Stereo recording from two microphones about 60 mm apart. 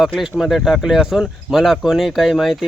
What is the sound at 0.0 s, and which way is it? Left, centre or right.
Speech, centre.